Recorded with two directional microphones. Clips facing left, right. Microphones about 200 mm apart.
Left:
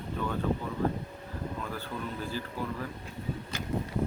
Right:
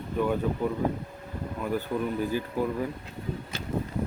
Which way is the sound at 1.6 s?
15° right (ahead or behind).